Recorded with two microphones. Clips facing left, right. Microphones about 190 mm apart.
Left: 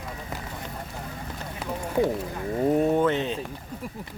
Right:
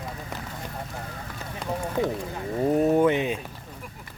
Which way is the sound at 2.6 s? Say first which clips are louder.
Right 2 dB; centre (ahead or behind).